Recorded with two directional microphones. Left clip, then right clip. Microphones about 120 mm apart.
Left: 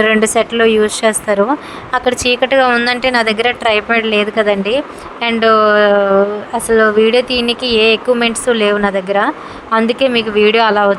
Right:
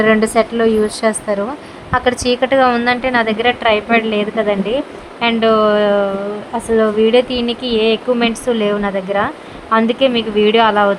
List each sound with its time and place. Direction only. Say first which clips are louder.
0.0 s a woman's voice: left 1 dB; 30° left (ahead or behind)
2.8 s a woman's voice: left 2 dB; 60° left (ahead or behind); by 10.9 s 35° left (ahead or behind)